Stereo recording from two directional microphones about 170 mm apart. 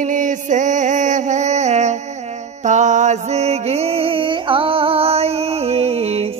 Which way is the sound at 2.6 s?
45° right (ahead or behind).